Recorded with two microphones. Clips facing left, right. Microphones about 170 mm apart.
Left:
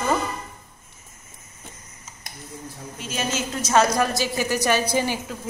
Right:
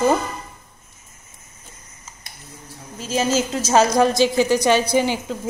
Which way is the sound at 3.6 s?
25° right (ahead or behind).